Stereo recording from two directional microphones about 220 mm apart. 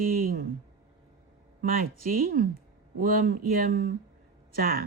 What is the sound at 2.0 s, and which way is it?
Speech, 40° right (ahead or behind).